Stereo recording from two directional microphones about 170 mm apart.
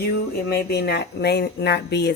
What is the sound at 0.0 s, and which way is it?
A woman's voice, 75° left (ahead or behind).